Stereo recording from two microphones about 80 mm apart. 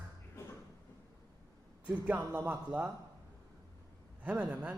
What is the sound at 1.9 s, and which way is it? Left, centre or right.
Speech, centre.